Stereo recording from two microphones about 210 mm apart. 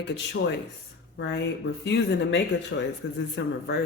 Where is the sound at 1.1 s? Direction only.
60° left (ahead or behind).